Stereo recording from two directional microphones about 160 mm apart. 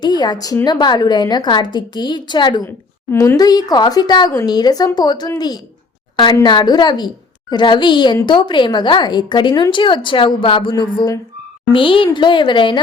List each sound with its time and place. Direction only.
0.0 s speech: 25° left (ahead or behind)
2.6 s a woman's voice: 15° left (ahead or behind)